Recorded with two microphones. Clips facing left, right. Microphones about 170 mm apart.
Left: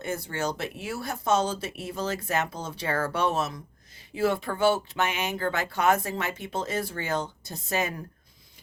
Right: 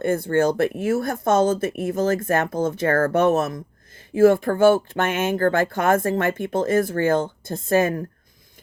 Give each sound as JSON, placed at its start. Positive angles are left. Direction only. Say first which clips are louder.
{"t": 0.0, "sound": "speech", "louder": "right 11 dB", "side_deg": -55}